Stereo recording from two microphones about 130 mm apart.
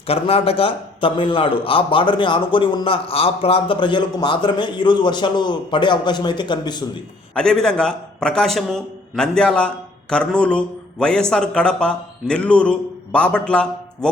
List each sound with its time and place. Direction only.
0.1 s a man's voice: 50° left (ahead or behind)
7.3 s a man's voice: 5° left (ahead or behind)